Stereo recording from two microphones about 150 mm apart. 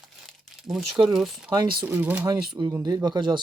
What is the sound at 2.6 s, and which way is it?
Speech, 25° right (ahead or behind).